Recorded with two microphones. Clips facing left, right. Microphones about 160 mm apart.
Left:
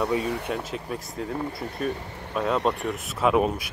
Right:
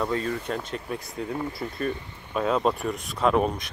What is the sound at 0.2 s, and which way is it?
Speech, 75° left (ahead or behind).